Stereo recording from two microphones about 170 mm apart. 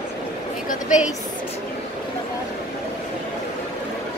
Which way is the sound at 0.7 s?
50° left (ahead or behind).